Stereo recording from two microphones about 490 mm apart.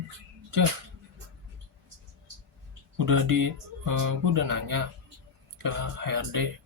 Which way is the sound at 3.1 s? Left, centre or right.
Right.